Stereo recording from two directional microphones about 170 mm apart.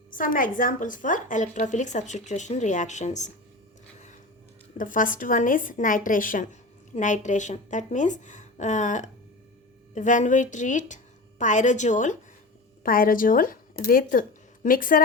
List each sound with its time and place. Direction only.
0.1 s a woman's voice: 55° left (ahead or behind)
4.8 s a woman's voice: 50° left (ahead or behind)